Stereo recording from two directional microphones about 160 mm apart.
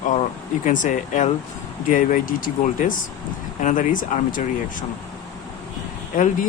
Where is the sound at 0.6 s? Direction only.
50° left (ahead or behind).